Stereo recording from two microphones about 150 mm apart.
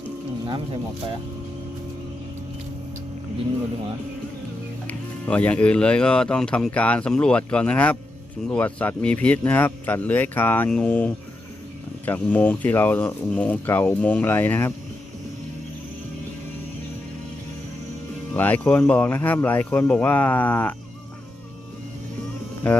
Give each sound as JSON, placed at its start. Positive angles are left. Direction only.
{"t": 4.9, "sound": "speech", "side_deg": 10}
{"t": 18.3, "sound": "speech", "side_deg": 10}
{"t": 22.6, "sound": "speech", "side_deg": 10}